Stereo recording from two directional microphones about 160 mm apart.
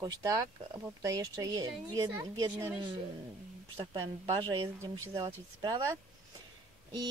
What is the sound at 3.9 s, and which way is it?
Speech, 25° right (ahead or behind).